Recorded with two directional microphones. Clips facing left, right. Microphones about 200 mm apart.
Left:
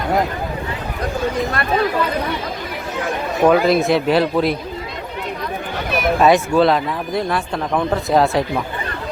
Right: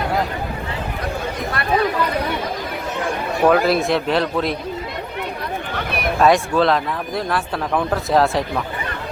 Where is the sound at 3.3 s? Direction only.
Centre (ahead or behind).